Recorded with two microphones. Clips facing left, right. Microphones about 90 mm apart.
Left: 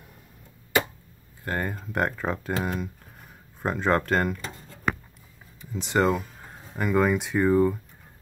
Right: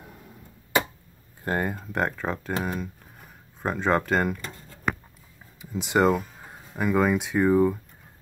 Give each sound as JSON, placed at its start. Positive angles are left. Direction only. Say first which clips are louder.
{"t": 1.4, "sound": "speech", "louder": "right 3 dB", "side_deg": -20}
{"t": 1.7, "sound": "speech", "louder": "even", "side_deg": 0}
{"t": 5.6, "sound": "speech", "louder": "right 2 dB", "side_deg": -5}